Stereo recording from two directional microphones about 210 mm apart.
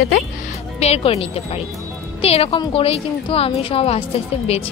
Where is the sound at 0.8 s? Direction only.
30° left (ahead or behind).